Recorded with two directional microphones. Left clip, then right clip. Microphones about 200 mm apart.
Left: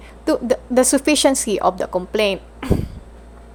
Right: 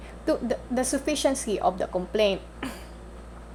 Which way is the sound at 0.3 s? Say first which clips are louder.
Left 8 dB; 25° left (ahead or behind).